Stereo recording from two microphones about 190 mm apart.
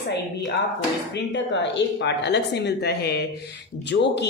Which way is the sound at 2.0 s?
65° left (ahead or behind).